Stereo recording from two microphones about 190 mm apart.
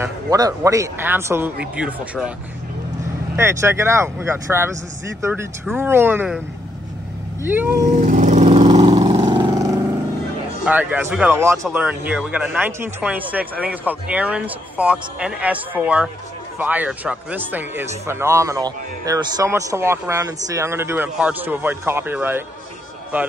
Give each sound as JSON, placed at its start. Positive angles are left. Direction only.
{"t": 0.0, "sound": "speech", "side_deg": -20}
{"t": 3.3, "sound": "speech", "side_deg": -15}
{"t": 7.4, "sound": "speech", "side_deg": -10}
{"t": 7.9, "sound": "vehicle", "side_deg": -40}
{"t": 10.6, "sound": "speech", "side_deg": -10}